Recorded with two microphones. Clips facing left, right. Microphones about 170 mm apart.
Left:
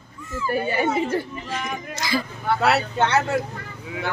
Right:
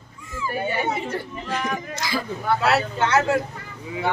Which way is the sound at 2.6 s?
60° left (ahead or behind).